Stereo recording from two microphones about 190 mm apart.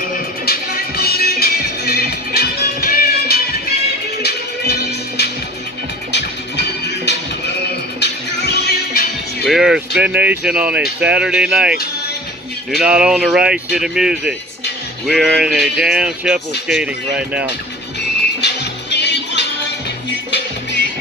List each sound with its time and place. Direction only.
0.1 s music: 50° left (ahead or behind)
9.4 s speech: centre (ahead or behind)
18.4 s music: 65° left (ahead or behind)